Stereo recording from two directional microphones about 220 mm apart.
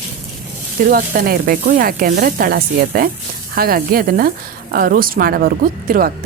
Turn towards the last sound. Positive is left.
turn(degrees=-40)  # may be behind; listen again after turning